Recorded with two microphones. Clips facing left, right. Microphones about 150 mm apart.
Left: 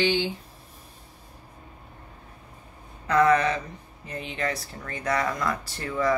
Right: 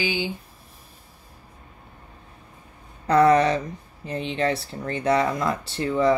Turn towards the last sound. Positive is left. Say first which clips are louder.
# right 5 dB
turn(degrees=-25)  # may be behind; listen again after turning